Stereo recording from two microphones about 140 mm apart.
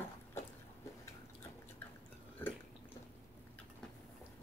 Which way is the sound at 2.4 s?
15° left (ahead or behind).